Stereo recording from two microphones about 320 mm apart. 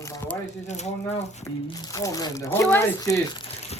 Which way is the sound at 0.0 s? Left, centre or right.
Centre.